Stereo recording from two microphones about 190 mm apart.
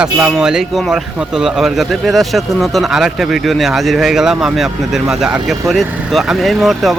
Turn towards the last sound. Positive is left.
turn(degrees=0)  # may be behind; listen again after turning